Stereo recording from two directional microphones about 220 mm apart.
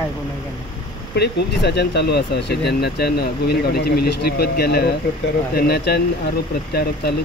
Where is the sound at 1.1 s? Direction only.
50° left (ahead or behind).